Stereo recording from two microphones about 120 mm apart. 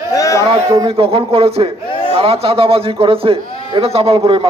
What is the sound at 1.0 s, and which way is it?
A man's voice, 50° right (ahead or behind).